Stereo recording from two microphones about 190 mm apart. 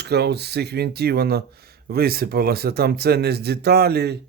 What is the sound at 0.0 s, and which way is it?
Speech, 60° right (ahead or behind).